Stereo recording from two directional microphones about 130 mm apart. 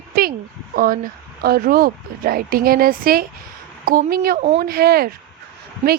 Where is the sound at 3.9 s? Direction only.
90° right.